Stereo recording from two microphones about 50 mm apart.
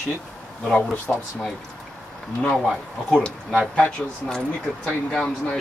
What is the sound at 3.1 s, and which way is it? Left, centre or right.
Speech, centre.